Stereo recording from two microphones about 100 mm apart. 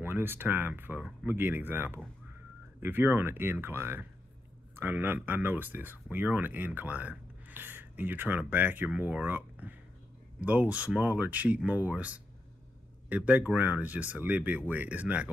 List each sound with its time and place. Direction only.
0.0 s speech: 20° right (ahead or behind)